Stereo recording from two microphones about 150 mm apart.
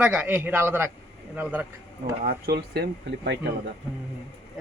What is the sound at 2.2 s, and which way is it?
Speech, 80° right.